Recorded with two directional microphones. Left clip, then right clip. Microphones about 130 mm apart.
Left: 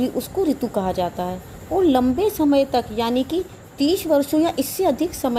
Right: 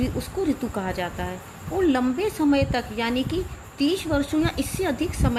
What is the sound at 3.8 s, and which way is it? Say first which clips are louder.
A woman's voice: left 5 dB; 80° left.